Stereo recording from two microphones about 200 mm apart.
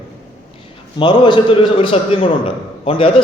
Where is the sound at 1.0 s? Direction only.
25° left (ahead or behind).